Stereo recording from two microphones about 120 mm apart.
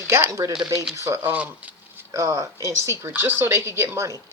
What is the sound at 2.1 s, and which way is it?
Speech, 25° right (ahead or behind).